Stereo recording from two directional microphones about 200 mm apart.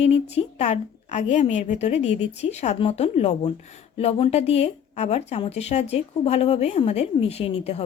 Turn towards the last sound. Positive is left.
turn(degrees=30)  # may be behind; listen again after turning